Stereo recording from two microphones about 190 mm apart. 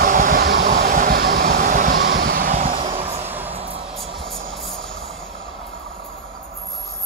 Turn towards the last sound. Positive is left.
turn(degrees=0)  # may be behind; listen again after turning